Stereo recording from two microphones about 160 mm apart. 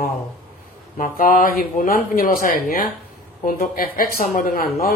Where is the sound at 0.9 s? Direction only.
60° left (ahead or behind).